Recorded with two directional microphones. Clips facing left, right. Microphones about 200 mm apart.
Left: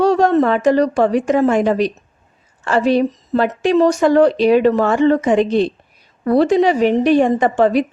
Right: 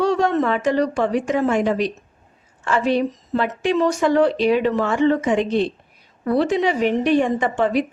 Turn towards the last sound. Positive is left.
turn(degrees=40)  # may be behind; listen again after turning